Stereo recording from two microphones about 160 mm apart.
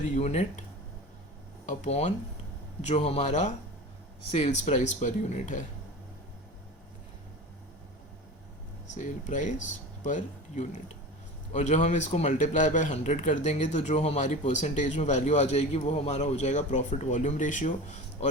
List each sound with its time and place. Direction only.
0.0 s speech: 45° left (ahead or behind)
1.6 s speech: 45° left (ahead or behind)
9.0 s speech: 50° left (ahead or behind)